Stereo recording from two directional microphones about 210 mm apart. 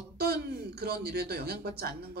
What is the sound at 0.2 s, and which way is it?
Speech, 50° right (ahead or behind).